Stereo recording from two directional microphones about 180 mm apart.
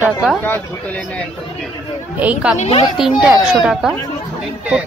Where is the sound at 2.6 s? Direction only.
35° left (ahead or behind).